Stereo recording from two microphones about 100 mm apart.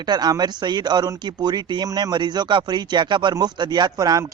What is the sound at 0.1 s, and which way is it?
A man's voice, 45° right (ahead or behind).